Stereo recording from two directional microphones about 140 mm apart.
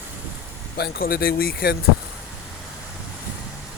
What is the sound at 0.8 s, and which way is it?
Speech, 90° left.